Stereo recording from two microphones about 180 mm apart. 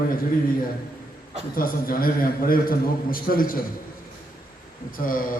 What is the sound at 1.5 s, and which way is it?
A man's voice, 50° left (ahead or behind).